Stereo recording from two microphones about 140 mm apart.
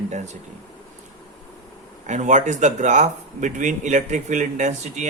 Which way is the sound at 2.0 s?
60° right (ahead or behind).